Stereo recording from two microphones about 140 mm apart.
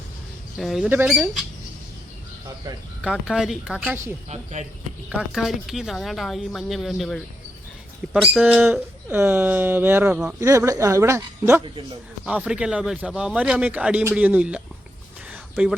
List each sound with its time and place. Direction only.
0.6 s speech: centre (ahead or behind)
0.9 s a man's voice: 15° right (ahead or behind)
3.0 s a man's voice: 5° right (ahead or behind)
5.0 s speech: 5° right (ahead or behind)
9.0 s a man's voice: 15° right (ahead or behind)
11.6 s a man's voice: 35° right (ahead or behind)
12.2 s a man's voice: 10° right (ahead or behind)
15.3 s a sound: 10° right (ahead or behind)